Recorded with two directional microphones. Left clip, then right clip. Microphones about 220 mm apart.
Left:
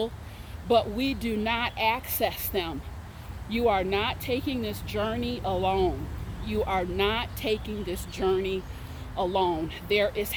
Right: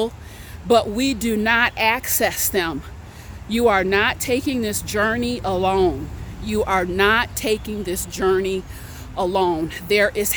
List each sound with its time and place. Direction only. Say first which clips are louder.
0.7 s speech: right 7 dB; 35° right (ahead or behind)